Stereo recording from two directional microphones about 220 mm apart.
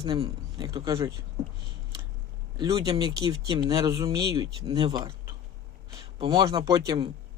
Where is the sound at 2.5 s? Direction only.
15° right (ahead or behind).